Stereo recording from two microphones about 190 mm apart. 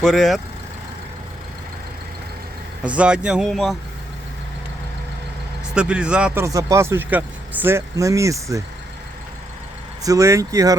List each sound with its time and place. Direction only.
0.0 s speech: centre (ahead or behind)
2.8 s speech: 5° right (ahead or behind)
5.7 s speech: 5° right (ahead or behind)
10.0 s speech: 20° right (ahead or behind)